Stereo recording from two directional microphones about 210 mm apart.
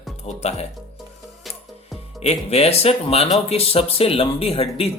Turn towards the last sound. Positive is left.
turn(degrees=30)  # may be behind; listen again after turning